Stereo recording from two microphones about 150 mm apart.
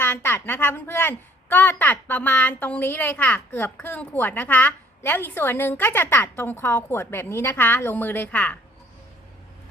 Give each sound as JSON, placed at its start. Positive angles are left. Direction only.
{"t": 0.0, "sound": "a woman's voice", "side_deg": 15}